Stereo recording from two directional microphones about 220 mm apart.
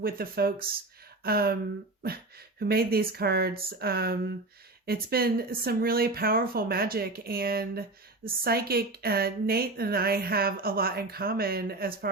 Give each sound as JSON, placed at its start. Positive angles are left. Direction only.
{"t": 0.0, "sound": "a woman's voice", "side_deg": -40}
{"t": 2.6, "sound": "a woman's voice", "side_deg": -45}